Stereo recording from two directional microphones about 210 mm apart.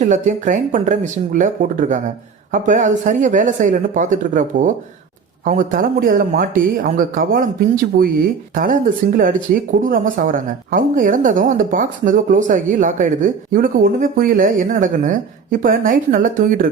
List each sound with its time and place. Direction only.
0.0 s a woman's voice: 35° right (ahead or behind)